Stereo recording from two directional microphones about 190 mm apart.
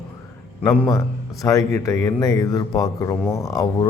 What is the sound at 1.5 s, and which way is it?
Speech, 15° left (ahead or behind).